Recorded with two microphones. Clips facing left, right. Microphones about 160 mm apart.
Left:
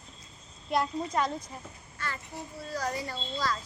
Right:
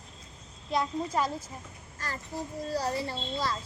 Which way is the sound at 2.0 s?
35° right (ahead or behind).